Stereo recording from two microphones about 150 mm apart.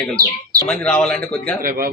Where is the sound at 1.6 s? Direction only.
75° right (ahead or behind).